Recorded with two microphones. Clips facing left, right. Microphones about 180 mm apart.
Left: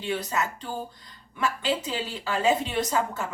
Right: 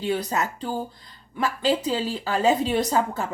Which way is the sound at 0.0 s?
35° right (ahead or behind).